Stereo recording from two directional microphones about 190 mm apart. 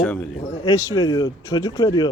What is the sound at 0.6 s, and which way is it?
Speech, 20° left (ahead or behind).